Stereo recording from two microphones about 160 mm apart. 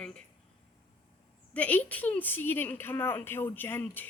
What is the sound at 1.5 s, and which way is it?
A woman's voice, 10° left (ahead or behind).